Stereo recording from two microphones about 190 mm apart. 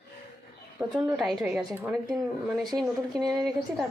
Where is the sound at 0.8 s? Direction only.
5° right (ahead or behind).